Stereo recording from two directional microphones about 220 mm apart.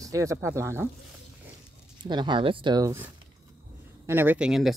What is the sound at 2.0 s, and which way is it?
Speech, 20° right (ahead or behind).